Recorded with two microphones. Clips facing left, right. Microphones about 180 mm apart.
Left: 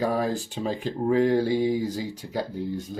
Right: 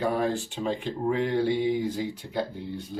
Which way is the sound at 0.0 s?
35° left (ahead or behind).